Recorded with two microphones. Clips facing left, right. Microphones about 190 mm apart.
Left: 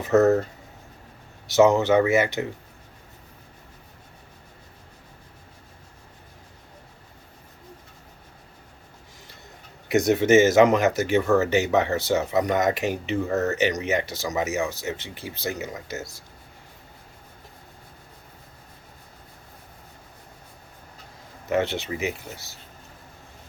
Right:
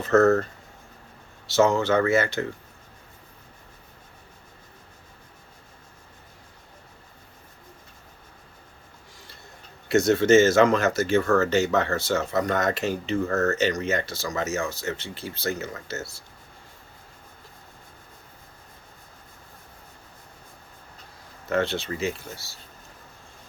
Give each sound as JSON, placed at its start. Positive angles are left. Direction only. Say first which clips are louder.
{"t": 0.0, "sound": "speech", "louder": "even", "side_deg": 15}
{"t": 1.5, "sound": "speech", "louder": "left 3 dB", "side_deg": 15}
{"t": 9.9, "sound": "speech", "louder": "even", "side_deg": 15}
{"t": 21.5, "sound": "speech", "louder": "left 1 dB", "side_deg": 15}